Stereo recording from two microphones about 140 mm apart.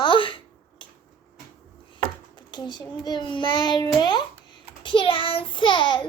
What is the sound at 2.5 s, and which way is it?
A child's voice, 35° left (ahead or behind).